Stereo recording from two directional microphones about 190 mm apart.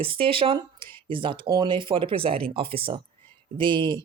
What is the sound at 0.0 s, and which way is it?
Speech, 30° right (ahead or behind).